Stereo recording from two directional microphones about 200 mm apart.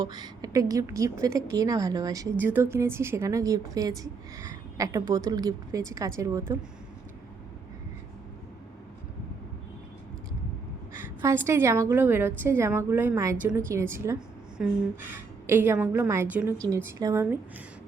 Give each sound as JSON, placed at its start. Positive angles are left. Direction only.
{"t": 0.0, "sound": "a woman's voice", "side_deg": -20}
{"t": 10.9, "sound": "a woman's voice", "side_deg": -10}